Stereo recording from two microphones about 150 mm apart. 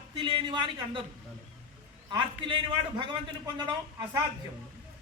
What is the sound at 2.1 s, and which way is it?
A man's voice, 35° right (ahead or behind).